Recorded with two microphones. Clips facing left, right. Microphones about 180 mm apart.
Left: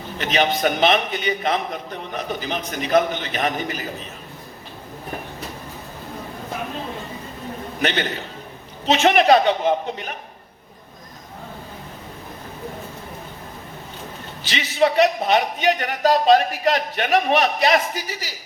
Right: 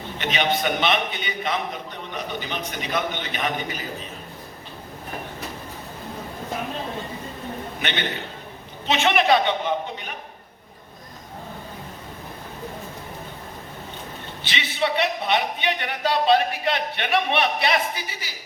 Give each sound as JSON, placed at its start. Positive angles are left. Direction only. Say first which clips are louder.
{"t": 0.2, "sound": "a man's voice", "louder": "left 4 dB", "side_deg": 40}
{"t": 7.8, "sound": "a man's voice", "louder": "left 7 dB", "side_deg": 40}
{"t": 14.4, "sound": "a man's voice", "louder": "left 6 dB", "side_deg": 45}